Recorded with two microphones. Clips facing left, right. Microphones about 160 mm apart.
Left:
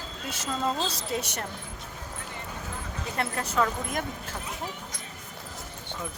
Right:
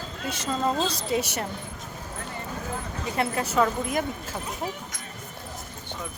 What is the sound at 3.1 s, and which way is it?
Speech, 5° right (ahead or behind).